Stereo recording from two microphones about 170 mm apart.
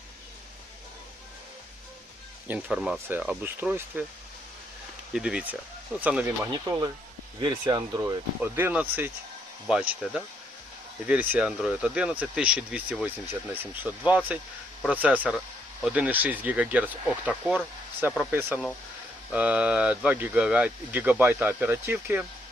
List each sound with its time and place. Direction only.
2.5 s speech: 5° right (ahead or behind)
5.1 s speech: 5° right (ahead or behind)
6.5 s speech: 25° right (ahead or behind)
8.4 s speech: 10° right (ahead or behind)